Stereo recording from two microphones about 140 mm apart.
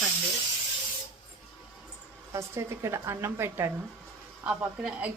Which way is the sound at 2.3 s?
20° right (ahead or behind).